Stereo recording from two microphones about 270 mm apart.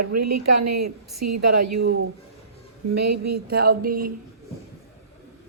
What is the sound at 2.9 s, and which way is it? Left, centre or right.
Speech, right.